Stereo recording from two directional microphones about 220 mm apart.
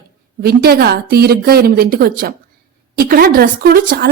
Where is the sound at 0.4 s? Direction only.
45° right (ahead or behind).